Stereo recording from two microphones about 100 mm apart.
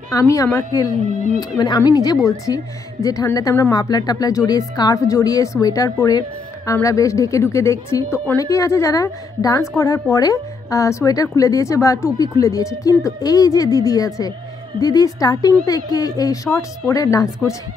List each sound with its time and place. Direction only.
0.1 s speech: 35° left (ahead or behind)